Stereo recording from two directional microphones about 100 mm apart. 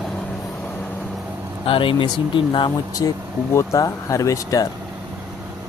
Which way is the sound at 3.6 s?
35° left (ahead or behind).